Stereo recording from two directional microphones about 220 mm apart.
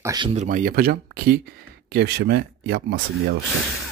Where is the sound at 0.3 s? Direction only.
35° right (ahead or behind).